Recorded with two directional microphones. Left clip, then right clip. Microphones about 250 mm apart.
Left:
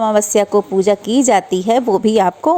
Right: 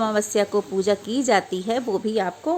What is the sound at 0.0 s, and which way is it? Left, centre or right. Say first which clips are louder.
A woman's voice: left 8 dB; centre.